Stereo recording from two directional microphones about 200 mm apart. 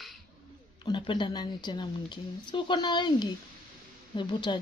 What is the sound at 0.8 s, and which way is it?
Speech, 25° left (ahead or behind).